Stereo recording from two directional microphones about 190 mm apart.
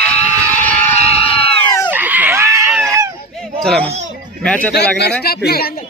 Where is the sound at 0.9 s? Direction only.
30° left (ahead or behind).